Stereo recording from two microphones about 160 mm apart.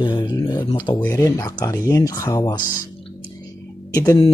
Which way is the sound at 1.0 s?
20° left (ahead or behind).